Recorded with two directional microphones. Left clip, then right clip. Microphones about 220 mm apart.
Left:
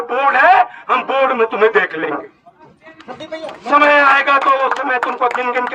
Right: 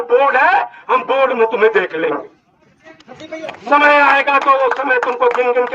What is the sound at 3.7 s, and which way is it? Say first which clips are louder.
A man's voice: even; 25° left (ahead or behind).